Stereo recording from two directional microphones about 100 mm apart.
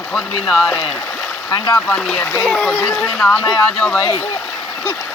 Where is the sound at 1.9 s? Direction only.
10° left (ahead or behind).